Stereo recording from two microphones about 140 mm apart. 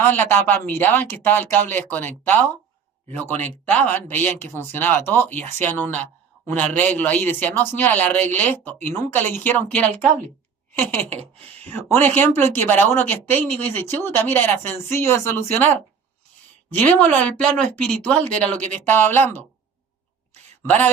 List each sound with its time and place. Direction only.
0.3 s speech: 15° left (ahead or behind)
11.1 s speech: 50° right (ahead or behind)
11.7 s speech: 15° left (ahead or behind)
16.7 s speech: 10° left (ahead or behind)
20.7 s speech: 15° left (ahead or behind)